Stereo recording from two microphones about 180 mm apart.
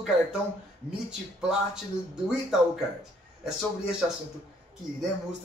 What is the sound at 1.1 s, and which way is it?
Speech, 5° right (ahead or behind).